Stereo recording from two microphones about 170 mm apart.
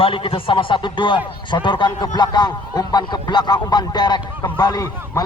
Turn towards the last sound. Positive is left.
turn(degrees=20)  # may be behind; listen again after turning